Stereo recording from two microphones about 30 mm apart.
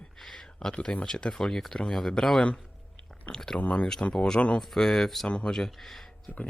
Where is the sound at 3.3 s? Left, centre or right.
Centre.